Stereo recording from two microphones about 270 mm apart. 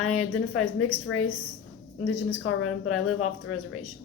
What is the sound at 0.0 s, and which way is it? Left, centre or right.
A woman's voice, left.